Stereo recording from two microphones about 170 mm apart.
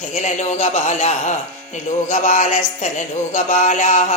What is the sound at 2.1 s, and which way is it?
Music, 45° left (ahead or behind).